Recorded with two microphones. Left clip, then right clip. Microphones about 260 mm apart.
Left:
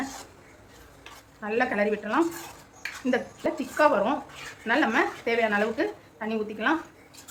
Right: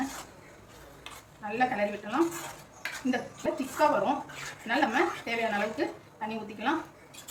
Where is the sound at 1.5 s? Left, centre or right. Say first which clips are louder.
Left 3 dB; centre.